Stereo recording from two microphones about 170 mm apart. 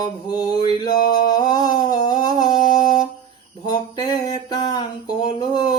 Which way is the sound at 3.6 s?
25° left (ahead or behind).